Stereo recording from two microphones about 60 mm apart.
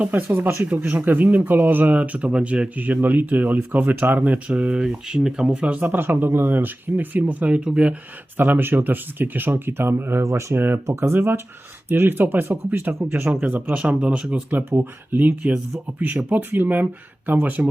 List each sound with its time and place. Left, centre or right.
0.0 s speech: right
0.3 s speech: right
0.7 s speech: right
5.8 s speech: right; by 7.9 s centre
8.4 s speech: right
13.7 s speech: centre
14.7 s speech: right